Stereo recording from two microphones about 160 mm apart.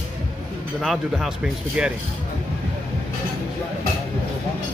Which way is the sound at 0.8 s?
Centre (ahead or behind).